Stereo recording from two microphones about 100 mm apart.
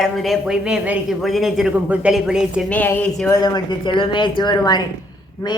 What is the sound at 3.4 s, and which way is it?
Speech, 45° left (ahead or behind).